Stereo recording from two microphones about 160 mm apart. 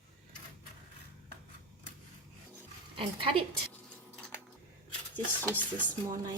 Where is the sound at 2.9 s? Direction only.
35° right (ahead or behind).